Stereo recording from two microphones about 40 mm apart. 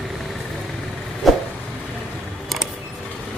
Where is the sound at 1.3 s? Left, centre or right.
Centre.